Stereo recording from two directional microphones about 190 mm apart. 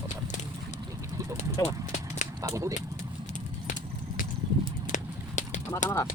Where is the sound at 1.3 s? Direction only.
35° left (ahead or behind).